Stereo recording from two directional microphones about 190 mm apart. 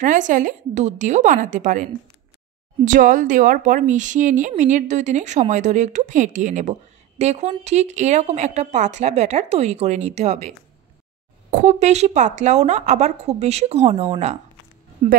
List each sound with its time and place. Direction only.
0.0 s speech: 40° right (ahead or behind)
11.5 s speech: 40° right (ahead or behind)